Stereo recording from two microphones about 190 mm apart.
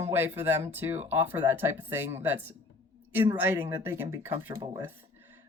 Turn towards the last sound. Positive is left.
turn(degrees=-15)  # may be behind; listen again after turning